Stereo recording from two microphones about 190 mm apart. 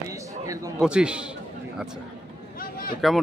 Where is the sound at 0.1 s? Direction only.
15° right (ahead or behind).